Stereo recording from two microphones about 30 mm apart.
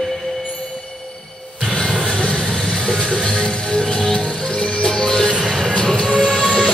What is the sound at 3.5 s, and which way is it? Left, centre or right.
Music, left.